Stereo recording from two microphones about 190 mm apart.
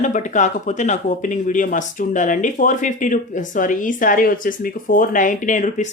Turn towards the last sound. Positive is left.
turn(degrees=40)  # may be behind; listen again after turning